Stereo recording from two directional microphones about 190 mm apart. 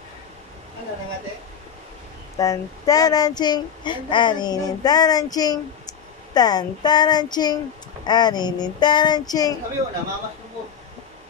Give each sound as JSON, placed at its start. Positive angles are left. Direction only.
{"t": 2.3, "sound": "speech", "side_deg": 20}